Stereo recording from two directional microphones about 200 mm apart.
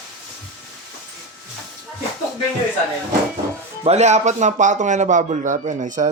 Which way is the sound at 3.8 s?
35° right (ahead or behind).